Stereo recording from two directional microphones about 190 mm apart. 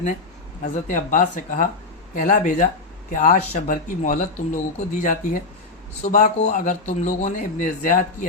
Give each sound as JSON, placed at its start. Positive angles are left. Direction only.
{"t": 0.6, "sound": "speech", "side_deg": 40}